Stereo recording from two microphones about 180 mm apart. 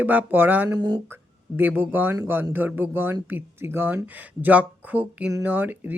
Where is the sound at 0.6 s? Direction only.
20° right (ahead or behind).